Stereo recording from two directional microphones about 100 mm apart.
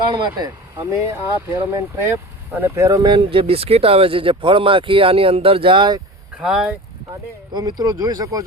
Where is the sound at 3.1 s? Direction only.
60° right (ahead or behind).